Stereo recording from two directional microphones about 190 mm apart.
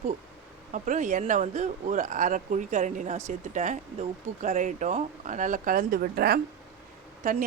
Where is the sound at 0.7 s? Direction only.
40° right (ahead or behind).